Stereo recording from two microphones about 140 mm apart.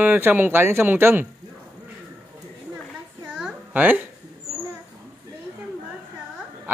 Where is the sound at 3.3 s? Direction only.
10° right (ahead or behind).